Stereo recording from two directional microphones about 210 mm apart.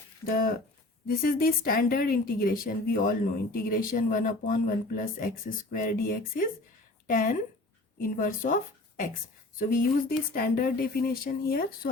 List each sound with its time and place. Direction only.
0.3 s a woman's voice: 45° left (ahead or behind)